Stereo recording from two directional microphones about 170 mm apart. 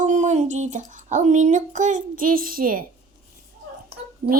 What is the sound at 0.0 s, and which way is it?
Speech, 45° right (ahead or behind).